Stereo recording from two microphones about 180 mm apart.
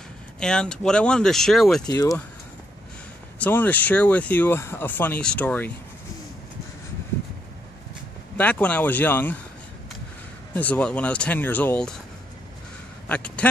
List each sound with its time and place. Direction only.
0.4 s speech: 5° left (ahead or behind)
1.9 s speech: 20° left (ahead or behind)
3.3 s speech: 10° left (ahead or behind)
8.4 s speech: 5° left (ahead or behind)
10.5 s speech: 10° left (ahead or behind)
13.1 s speech: 5° left (ahead or behind)